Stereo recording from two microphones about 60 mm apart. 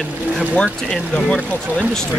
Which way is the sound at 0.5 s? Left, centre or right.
Centre.